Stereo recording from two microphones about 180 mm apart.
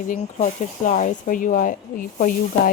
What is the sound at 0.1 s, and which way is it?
Speech, 45° left (ahead or behind).